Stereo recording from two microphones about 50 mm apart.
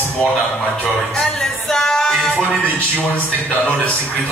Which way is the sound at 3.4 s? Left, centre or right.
Left.